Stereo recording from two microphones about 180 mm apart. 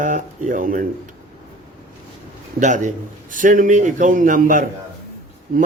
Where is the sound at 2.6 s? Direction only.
45° right (ahead or behind).